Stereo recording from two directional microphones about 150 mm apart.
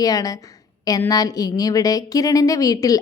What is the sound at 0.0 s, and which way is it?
A woman's voice, 25° left (ahead or behind).